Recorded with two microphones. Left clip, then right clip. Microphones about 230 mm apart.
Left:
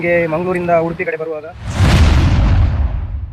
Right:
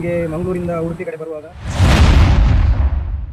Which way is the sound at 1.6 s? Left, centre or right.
Centre.